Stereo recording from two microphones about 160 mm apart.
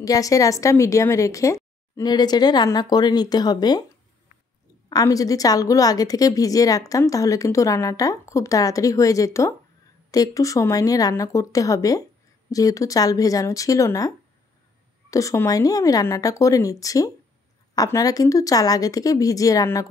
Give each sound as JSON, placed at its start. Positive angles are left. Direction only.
{"t": 0.0, "sound": "a woman's voice", "side_deg": 20}
{"t": 4.8, "sound": "a woman's voice", "side_deg": 20}